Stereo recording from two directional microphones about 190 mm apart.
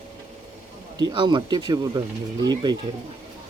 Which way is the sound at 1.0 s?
25° right (ahead or behind).